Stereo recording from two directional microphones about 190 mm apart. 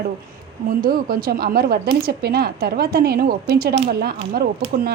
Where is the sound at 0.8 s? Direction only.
50° right (ahead or behind).